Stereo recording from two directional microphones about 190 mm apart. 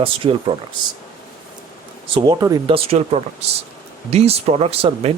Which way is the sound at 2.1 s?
25° right (ahead or behind).